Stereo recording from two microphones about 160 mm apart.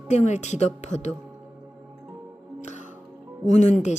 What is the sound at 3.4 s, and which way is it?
Speech, 50° left (ahead or behind).